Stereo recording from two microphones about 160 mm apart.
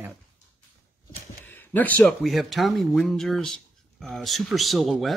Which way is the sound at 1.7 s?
10° left (ahead or behind).